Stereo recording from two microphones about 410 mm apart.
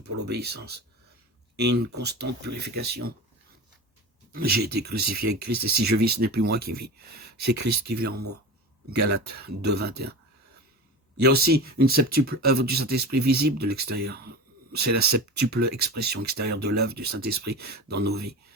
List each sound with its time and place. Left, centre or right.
0.3 s speech: right
4.3 s speech: right
11.2 s speech: right